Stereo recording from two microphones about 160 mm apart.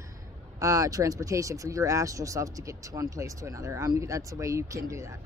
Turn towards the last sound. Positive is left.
turn(degrees=-20)  # may be behind; listen again after turning